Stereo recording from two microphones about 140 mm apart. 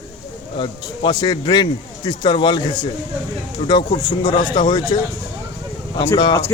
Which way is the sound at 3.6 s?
45° left (ahead or behind).